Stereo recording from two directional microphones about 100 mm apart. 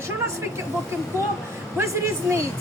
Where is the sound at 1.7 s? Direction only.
30° right (ahead or behind).